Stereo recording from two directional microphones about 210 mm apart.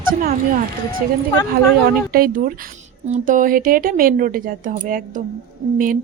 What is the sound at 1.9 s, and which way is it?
Speech, 45° right (ahead or behind).